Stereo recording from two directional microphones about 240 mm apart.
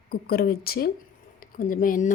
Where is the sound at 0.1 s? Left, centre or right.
Left.